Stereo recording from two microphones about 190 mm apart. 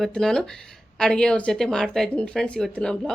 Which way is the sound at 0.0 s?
5° left (ahead or behind).